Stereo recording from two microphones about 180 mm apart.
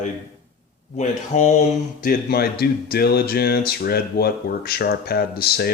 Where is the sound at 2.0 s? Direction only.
60° left (ahead or behind).